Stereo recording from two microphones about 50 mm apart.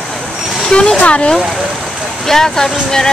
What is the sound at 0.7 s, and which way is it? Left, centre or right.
Speech, centre.